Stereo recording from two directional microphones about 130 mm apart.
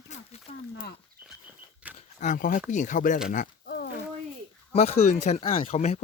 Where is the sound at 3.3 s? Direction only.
75° left (ahead or behind).